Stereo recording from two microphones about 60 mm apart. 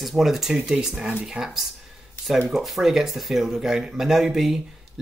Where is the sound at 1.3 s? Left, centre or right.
Centre.